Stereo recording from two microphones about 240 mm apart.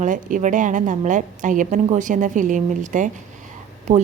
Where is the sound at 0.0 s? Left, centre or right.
Right.